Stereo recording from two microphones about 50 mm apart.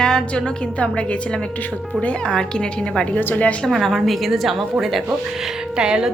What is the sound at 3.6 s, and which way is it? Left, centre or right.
A woman's voice, centre.